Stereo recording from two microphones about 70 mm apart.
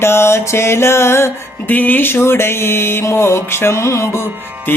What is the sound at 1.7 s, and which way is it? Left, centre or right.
Music, left.